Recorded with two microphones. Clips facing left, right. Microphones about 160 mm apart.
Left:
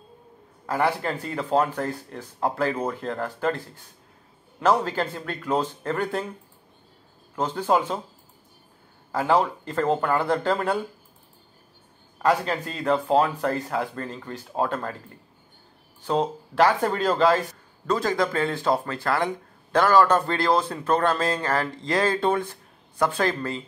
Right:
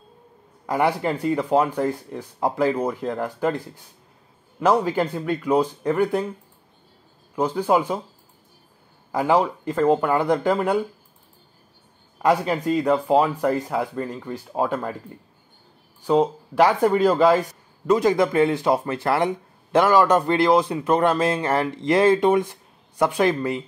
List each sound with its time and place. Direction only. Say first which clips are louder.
0.7 s speech: right 3 dB; 15° right (ahead or behind)
7.3 s speech: right 3 dB; 10° right (ahead or behind)
9.1 s speech: right 2 dB; 15° right (ahead or behind)
12.2 s speech: right 3 dB; 15° right (ahead or behind)
16.0 s speech: right 5 dB; 10° right (ahead or behind)